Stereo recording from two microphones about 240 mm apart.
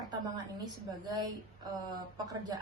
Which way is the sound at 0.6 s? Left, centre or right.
Centre.